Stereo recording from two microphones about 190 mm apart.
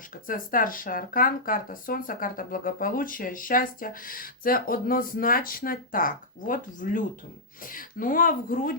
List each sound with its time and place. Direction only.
0.1 s speech: 45° left (ahead or behind)